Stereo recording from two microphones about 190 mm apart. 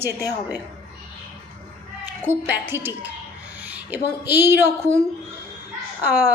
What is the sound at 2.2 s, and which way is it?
Speech, 10° right (ahead or behind).